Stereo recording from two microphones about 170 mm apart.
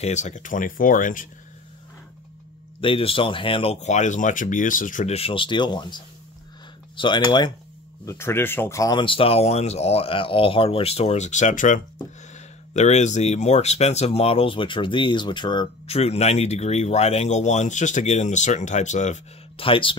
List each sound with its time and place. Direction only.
0.0 s speech: 45° left (ahead or behind)
2.8 s speech: 30° left (ahead or behind)
8.0 s speech: 15° left (ahead or behind)
16.0 s speech: 40° left (ahead or behind)